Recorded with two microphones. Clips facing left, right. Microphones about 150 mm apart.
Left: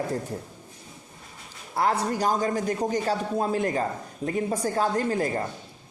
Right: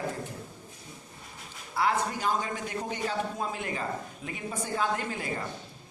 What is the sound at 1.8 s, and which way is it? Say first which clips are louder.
A man's voice: left 4 dB; 40° left (ahead or behind).